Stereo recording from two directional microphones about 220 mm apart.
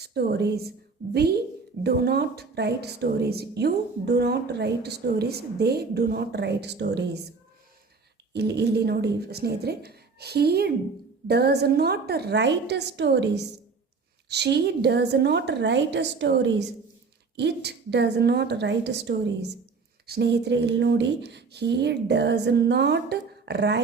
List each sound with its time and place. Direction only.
0.1 s a woman's voice: 50° right (ahead or behind)
8.3 s a woman's voice: 50° right (ahead or behind)